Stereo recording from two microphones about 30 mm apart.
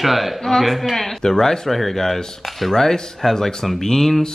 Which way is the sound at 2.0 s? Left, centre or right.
Centre.